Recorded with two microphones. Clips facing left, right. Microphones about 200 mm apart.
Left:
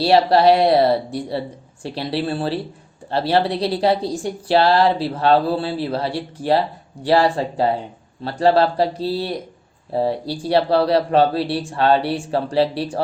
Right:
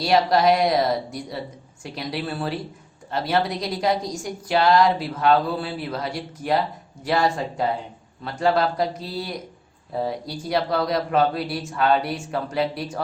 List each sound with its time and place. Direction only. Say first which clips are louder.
0.0 s a woman's voice: left 4 dB; 30° left (ahead or behind)